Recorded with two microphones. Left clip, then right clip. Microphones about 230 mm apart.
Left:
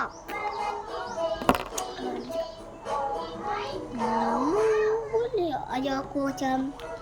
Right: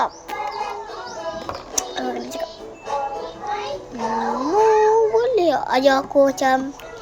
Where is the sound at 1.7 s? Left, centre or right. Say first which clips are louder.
Right 8 dB; right.